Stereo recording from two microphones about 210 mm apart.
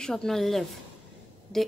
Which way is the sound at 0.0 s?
Centre (ahead or behind).